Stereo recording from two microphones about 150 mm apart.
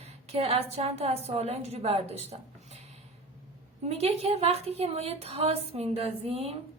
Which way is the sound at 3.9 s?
45° right (ahead or behind).